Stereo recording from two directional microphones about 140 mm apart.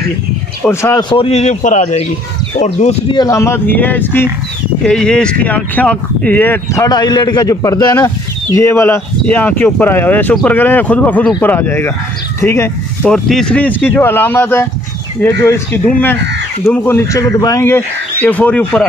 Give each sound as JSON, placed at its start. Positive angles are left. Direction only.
{"t": 0.6, "sound": "speech", "side_deg": 20}
{"t": 1.1, "sound": "speech", "side_deg": 45}
{"t": 3.1, "sound": "speech", "side_deg": 25}
{"t": 13.1, "sound": "speech", "side_deg": 5}